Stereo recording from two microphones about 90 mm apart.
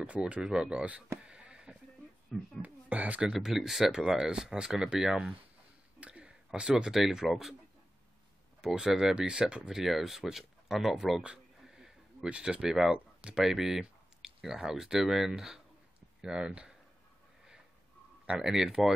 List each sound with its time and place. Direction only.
0.0 s speech: 15° right (ahead or behind)
1.2 s a sound: 10° right (ahead or behind)
2.6 s speech: 15° right (ahead or behind)
3.3 s speech: 5° right (ahead or behind)
5.9 s a sound: 10° right (ahead or behind)
6.7 s speech: 5° right (ahead or behind)
8.6 s speech: 5° right (ahead or behind)
18.2 s speech: 10° right (ahead or behind)